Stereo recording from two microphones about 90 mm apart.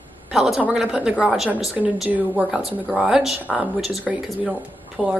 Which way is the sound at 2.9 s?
10° right (ahead or behind).